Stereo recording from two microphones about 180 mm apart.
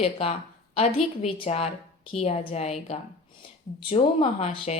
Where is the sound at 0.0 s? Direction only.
35° left (ahead or behind).